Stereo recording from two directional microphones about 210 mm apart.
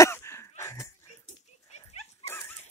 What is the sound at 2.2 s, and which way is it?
Dog, 15° left (ahead or behind).